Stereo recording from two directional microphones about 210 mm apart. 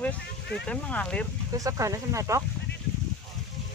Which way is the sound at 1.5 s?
15° right (ahead or behind).